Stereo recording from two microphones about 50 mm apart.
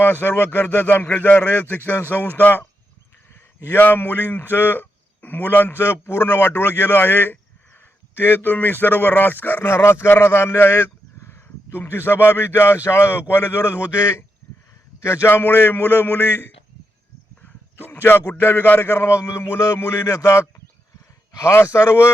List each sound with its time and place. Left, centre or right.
0.0 s a man's voice: left
1.0 s a man's voice: left
3.7 s a man's voice: left
5.8 s a man's voice: left
9.6 s a man's voice: left
11.2 s a sound: left
11.7 s a man's voice: left
15.3 s a man's voice: left
17.8 s a man's voice: left
18.9 s a man's voice: left
19.5 s a man's voice: left
20.1 s speech: left
21.5 s a man's voice: left